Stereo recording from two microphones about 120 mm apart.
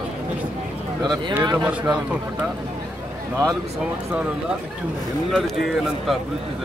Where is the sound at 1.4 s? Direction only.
35° right (ahead or behind).